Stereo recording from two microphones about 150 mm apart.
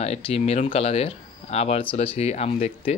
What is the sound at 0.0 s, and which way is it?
Speech, 45° left (ahead or behind).